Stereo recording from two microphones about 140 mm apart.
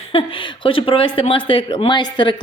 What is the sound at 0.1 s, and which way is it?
Speech, 40° left (ahead or behind).